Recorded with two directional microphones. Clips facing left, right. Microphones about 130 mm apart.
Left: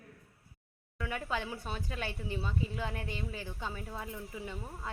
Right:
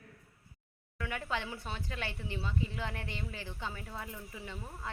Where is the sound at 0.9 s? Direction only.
10° left (ahead or behind).